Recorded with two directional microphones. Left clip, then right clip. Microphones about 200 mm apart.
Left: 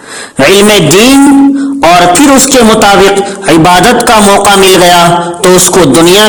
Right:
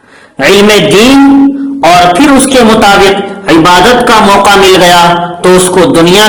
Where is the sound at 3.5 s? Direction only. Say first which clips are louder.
Right 1 dB; 45° left (ahead or behind).